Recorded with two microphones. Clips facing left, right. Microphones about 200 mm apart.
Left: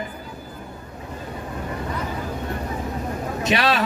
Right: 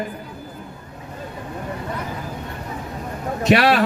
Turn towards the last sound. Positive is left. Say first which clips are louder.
# right 5 dB
turn(degrees=-60)  # may be behind; listen again after turning